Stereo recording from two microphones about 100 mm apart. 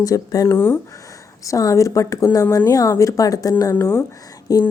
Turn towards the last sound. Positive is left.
turn(degrees=35)  # may be behind; listen again after turning